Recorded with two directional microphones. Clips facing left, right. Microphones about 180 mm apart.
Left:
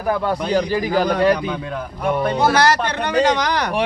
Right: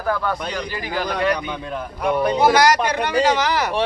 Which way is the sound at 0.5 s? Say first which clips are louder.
Left 8 dB; 40° left (ahead or behind).